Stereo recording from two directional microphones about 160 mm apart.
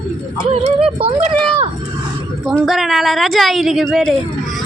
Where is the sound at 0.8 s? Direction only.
35° right (ahead or behind).